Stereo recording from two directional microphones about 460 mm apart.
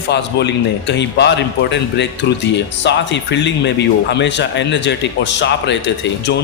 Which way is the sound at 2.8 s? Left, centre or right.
Left.